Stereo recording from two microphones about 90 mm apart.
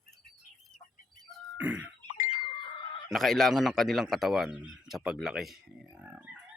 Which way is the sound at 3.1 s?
Centre (ahead or behind).